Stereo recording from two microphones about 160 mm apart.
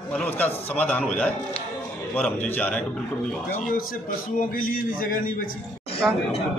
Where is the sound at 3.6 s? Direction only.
60° left (ahead or behind).